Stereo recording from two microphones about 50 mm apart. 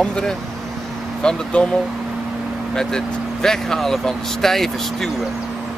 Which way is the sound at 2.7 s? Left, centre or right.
Centre.